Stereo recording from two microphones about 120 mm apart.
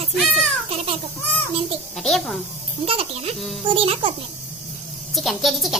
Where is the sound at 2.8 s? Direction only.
55° right (ahead or behind).